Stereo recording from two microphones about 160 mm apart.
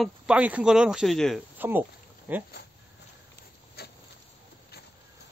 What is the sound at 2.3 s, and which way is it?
Speech, 10° right (ahead or behind).